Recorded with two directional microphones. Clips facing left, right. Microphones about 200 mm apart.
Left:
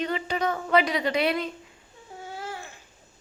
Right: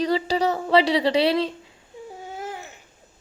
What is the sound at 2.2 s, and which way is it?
Babbling, 20° right (ahead or behind).